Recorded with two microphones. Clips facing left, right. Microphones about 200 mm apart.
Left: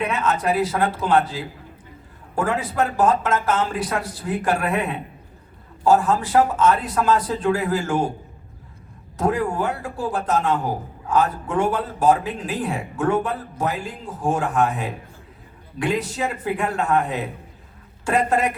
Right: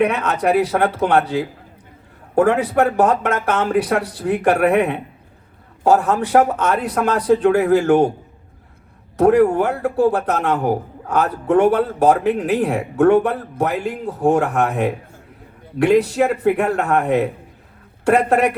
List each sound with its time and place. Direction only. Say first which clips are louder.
0.0 s a man's voice: right 5 dB; 65° right (ahead or behind)
9.1 s a man's voice: right 9 dB; 65° right (ahead or behind)